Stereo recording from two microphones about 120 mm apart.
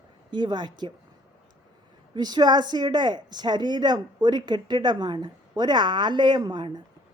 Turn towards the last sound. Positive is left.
turn(degrees=-40)  # may be behind; listen again after turning